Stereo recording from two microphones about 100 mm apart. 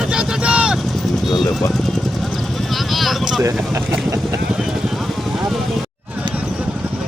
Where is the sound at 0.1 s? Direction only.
10° right (ahead or behind).